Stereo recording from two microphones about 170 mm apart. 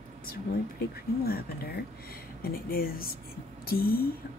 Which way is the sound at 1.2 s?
65° left (ahead or behind).